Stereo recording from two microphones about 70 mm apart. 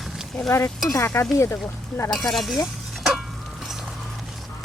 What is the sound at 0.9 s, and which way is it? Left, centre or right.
Speech, left.